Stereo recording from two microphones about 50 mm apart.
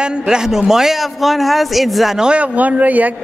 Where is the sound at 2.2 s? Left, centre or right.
Right.